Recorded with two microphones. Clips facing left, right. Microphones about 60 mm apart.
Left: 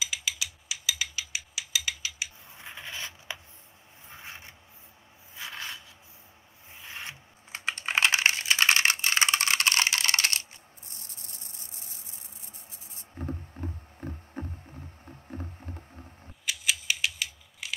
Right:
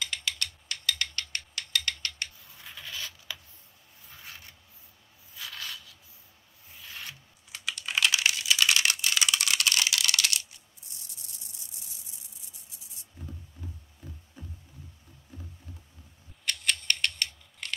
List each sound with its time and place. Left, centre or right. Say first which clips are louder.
0.0 s mechanisms: even; centre
2.5 s creak: left 2 dB; left
4.1 s a sound: left 3 dB; left
6.7 s computer keyboard: left 2 dB; left
16.4 s scissors: even; centre